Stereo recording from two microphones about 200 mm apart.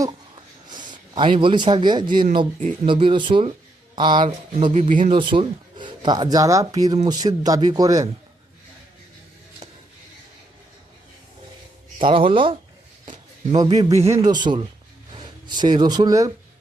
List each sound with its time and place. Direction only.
0.7 s speech: 20° right (ahead or behind)
4.7 s speech: 35° right (ahead or behind)
5.1 s speech: 25° right (ahead or behind)
11.9 s speech: 25° right (ahead or behind)
13.7 s speech: 15° right (ahead or behind)